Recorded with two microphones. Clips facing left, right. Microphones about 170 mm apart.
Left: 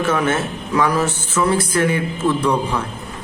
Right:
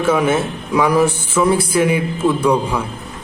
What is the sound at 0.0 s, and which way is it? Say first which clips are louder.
A man's voice: right 3 dB; 10° right (ahead or behind).